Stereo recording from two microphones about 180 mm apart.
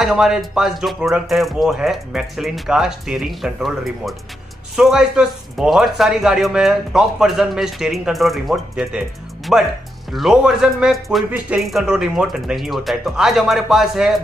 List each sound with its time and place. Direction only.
0.0 s a man's voice: centre (ahead or behind)